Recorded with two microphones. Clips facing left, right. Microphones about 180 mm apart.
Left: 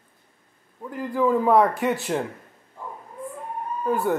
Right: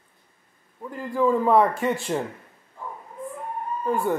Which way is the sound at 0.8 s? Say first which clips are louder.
Even; 5° left (ahead or behind).